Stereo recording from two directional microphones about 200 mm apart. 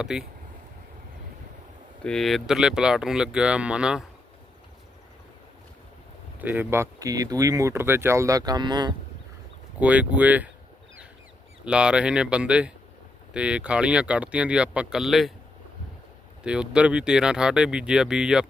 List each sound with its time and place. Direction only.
0.0 s speech: 5° right (ahead or behind)
2.0 s speech: centre (ahead or behind)
6.4 s speech: 10° right (ahead or behind)
9.8 s speech: 5° right (ahead or behind)
11.6 s speech: 5° right (ahead or behind)
16.4 s speech: 5° right (ahead or behind)